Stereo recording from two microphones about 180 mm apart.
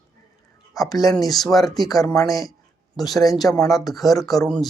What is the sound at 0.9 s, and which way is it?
Speech, 20° left (ahead or behind).